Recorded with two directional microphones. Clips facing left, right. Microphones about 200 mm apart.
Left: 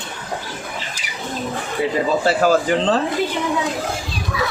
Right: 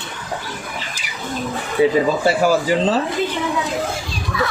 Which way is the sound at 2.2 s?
10° right (ahead or behind).